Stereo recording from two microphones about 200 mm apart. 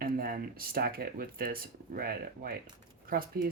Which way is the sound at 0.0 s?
45° right (ahead or behind).